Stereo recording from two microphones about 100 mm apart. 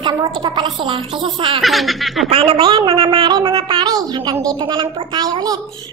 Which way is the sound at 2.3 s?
90° right.